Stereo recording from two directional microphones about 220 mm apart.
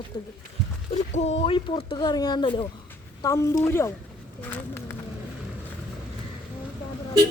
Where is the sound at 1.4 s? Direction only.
25° left (ahead or behind).